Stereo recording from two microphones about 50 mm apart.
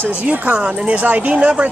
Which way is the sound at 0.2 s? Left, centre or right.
Right.